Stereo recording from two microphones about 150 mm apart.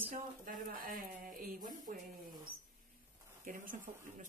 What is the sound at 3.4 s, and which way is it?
Speech, 60° right (ahead or behind).